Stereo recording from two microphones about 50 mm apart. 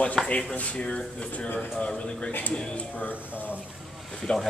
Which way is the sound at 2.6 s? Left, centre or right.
Centre.